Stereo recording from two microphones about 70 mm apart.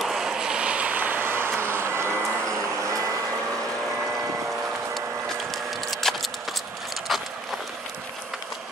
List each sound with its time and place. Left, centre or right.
0.0 s vehicle: centre; by 2.1 s right
5.5 s wood: centre
7.1 s a sound: centre